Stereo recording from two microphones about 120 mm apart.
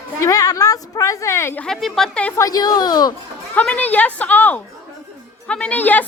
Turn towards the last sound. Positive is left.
turn(degrees=15)  # may be behind; listen again after turning